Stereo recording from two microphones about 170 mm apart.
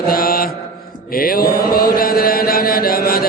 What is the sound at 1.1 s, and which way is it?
Mantra, 60° left (ahead or behind).